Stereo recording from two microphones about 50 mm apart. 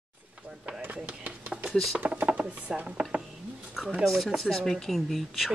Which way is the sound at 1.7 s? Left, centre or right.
Centre.